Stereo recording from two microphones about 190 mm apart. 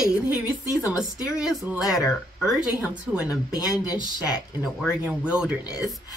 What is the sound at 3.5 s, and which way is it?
Speech, 20° left (ahead or behind).